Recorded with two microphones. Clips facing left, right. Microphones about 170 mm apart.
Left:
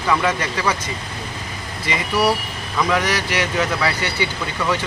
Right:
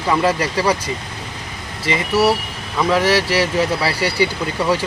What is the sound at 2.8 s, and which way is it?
Speech, 30° right (ahead or behind).